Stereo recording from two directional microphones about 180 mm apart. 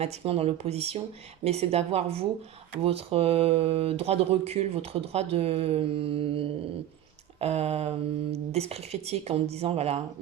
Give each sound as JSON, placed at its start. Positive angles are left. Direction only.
{"t": 0.0, "sound": "speech", "side_deg": -35}